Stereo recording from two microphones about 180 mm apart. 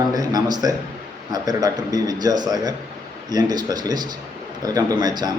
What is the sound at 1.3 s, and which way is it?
Speech, 20° right (ahead or behind).